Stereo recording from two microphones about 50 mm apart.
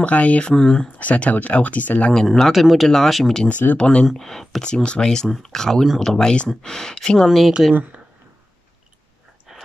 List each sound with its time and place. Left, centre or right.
0.0 s speech: left
0.5 s speech: centre
0.9 s speech: left
2.2 s speech: centre
3.7 s speech: centre
4.1 s speech: centre
7.2 s speech: centre